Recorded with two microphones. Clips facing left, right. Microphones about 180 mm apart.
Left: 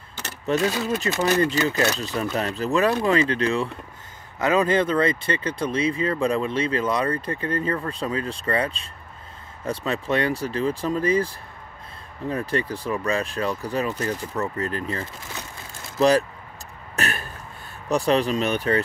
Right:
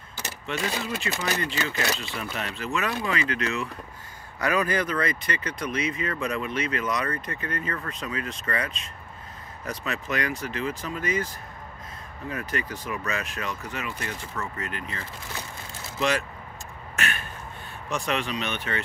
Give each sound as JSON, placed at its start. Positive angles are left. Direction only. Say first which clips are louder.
{"t": 0.5, "sound": "speech", "louder": "left 8 dB", "side_deg": 40}
{"t": 16.9, "sound": "a sound", "louder": "left 4 dB", "side_deg": 35}
{"t": 17.8, "sound": "speech", "louder": "left 8 dB", "side_deg": 35}